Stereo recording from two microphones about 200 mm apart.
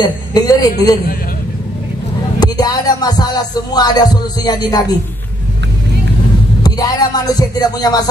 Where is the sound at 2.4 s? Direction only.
20° left (ahead or behind).